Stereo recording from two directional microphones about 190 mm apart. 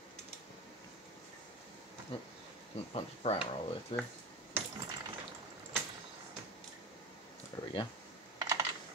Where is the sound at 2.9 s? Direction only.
30° left (ahead or behind).